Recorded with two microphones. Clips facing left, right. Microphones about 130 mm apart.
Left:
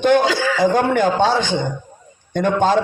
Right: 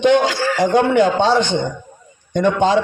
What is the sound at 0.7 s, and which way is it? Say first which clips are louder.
Speech: right 3 dB; 50° left (ahead or behind).